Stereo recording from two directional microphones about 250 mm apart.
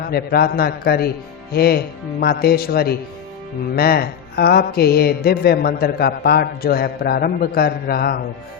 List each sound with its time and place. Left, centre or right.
0.0 s mantra: left